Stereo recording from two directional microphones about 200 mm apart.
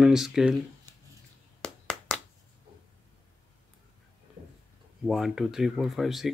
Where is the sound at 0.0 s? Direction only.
Centre (ahead or behind).